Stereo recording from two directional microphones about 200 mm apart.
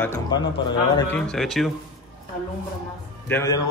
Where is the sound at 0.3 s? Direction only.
20° left (ahead or behind).